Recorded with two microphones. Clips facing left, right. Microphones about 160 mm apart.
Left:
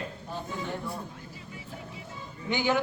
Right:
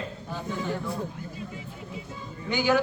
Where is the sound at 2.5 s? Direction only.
20° left (ahead or behind).